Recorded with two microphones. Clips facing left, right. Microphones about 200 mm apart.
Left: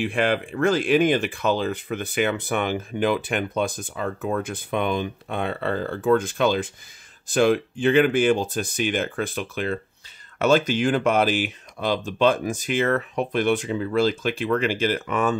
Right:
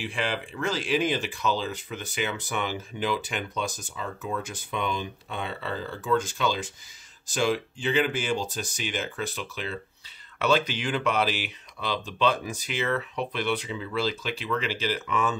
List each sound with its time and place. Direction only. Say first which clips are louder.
0.0 s speech: left 8 dB; 55° left (ahead or behind)